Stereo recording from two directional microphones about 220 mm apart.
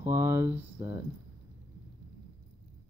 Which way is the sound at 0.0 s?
15° right (ahead or behind).